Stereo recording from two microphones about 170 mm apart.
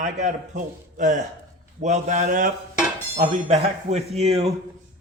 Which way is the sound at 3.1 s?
40° right (ahead or behind).